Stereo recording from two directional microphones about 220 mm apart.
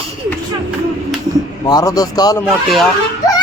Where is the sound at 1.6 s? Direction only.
15° left (ahead or behind).